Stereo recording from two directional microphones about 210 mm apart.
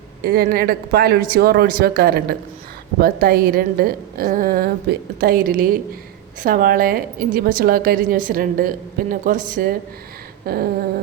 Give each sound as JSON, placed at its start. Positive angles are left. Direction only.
{"t": 0.2, "sound": "a woman's voice", "side_deg": -45}